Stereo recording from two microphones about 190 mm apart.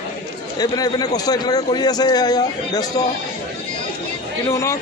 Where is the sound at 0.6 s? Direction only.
20° left (ahead or behind).